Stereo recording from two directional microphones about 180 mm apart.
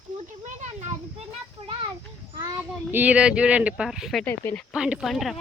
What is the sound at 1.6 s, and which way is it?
Children playing, 30° right (ahead or behind).